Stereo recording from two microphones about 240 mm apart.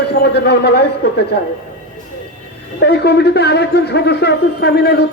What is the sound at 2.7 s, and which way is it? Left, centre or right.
Speech, left.